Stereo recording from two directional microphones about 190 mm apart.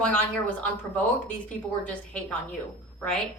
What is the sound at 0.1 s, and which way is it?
A woman's voice, 5° left (ahead or behind).